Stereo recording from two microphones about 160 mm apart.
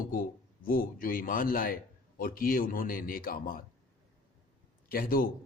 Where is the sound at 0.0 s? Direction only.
65° left (ahead or behind).